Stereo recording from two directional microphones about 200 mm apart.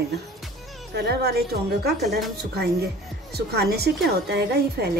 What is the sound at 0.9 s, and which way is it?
A woman's voice, 55° right (ahead or behind).